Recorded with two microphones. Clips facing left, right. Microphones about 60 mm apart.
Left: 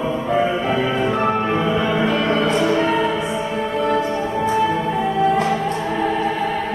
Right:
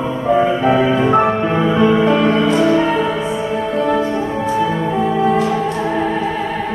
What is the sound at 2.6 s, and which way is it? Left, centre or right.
Music, centre.